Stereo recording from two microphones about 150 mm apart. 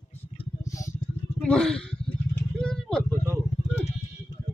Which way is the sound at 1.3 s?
5° left (ahead or behind).